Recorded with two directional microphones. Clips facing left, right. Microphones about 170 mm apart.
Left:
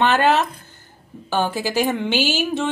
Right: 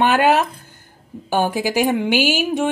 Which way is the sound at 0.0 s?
10° right (ahead or behind).